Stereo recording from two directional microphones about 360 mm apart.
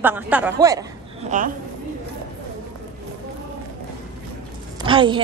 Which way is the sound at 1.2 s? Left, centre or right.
Right.